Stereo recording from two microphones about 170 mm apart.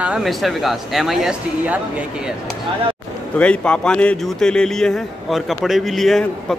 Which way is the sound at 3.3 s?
5° left (ahead or behind).